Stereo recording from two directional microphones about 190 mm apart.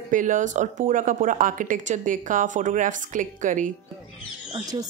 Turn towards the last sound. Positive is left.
turn(degrees=-20)  # may be behind; listen again after turning